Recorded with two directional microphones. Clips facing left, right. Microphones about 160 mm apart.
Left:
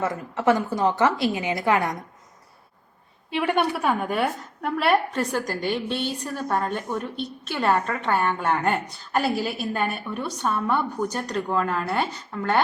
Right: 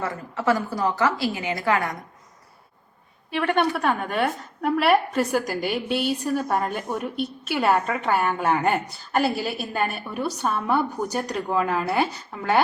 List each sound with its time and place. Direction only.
0.3 s a woman's voice: 20° left (ahead or behind)
3.2 s a woman's voice: 15° left (ahead or behind); by 12.0 s 5° right (ahead or behind)